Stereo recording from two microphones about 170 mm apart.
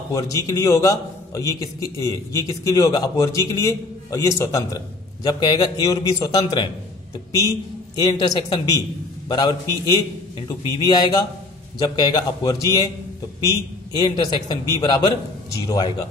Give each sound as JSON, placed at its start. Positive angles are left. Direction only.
{"t": 0.1, "sound": "a man's voice", "side_deg": 20}
{"t": 8.0, "sound": "a man's voice", "side_deg": 25}
{"t": 10.6, "sound": "a man's voice", "side_deg": 25}